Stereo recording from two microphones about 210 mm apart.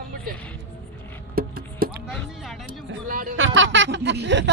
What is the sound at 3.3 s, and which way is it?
Music, 65° right (ahead or behind).